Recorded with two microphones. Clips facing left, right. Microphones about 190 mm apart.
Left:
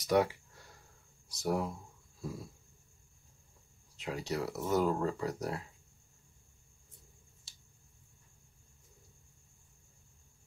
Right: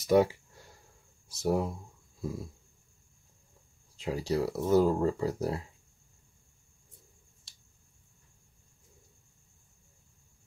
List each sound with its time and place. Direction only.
0.0 s speech: 25° right (ahead or behind)
3.9 s speech: 30° right (ahead or behind)
7.5 s finger snapping: centre (ahead or behind)